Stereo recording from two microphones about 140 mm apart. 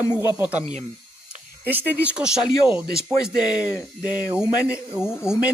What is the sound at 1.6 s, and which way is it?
Speech, 15° right (ahead or behind).